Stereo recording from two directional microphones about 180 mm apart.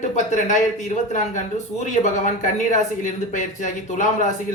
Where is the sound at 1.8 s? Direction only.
40° left (ahead or behind).